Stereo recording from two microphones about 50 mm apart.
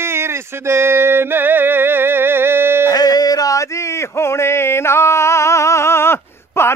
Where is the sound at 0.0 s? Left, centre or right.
Right.